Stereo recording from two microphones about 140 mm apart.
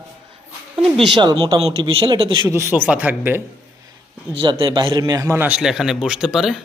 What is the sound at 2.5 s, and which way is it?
Speech, 15° right (ahead or behind).